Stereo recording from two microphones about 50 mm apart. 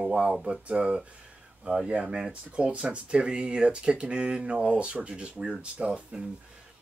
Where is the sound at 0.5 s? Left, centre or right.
Right.